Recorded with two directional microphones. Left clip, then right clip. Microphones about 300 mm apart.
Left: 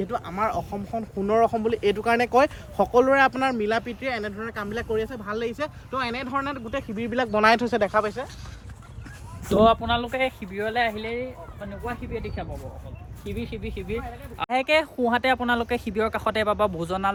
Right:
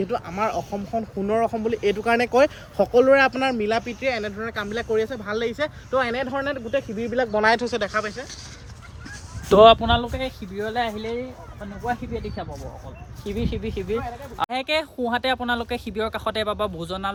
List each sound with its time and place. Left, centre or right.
0.0 s speech: centre
6.3 s speech: left
7.3 s speech: left; by 8.3 s centre
9.5 s speech: right
9.8 s speech: centre
10.1 s speech: centre
13.2 s speech: centre
14.5 s speech: centre